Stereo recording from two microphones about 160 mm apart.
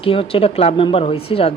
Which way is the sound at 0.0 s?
35° left (ahead or behind).